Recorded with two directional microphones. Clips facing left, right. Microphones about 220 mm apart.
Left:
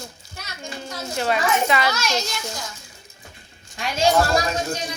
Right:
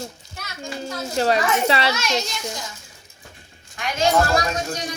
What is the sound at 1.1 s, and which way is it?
Speech, 35° right (ahead or behind).